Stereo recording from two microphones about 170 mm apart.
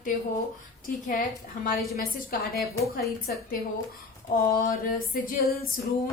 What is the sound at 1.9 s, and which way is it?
Speech, 60° left (ahead or behind).